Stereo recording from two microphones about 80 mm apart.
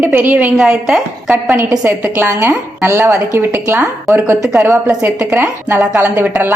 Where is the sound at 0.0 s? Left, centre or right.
Right.